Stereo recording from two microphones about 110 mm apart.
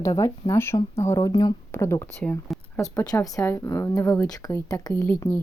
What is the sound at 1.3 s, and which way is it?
Speech, 45° left (ahead or behind).